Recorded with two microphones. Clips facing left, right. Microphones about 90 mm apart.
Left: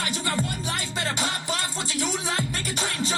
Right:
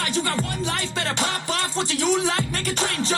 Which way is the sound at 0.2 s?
45° right (ahead or behind).